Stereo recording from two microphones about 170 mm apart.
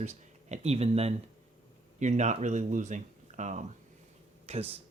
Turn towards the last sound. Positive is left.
turn(degrees=-35)  # may be behind; listen again after turning